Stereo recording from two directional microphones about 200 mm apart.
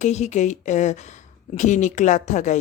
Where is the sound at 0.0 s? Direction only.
35° left (ahead or behind).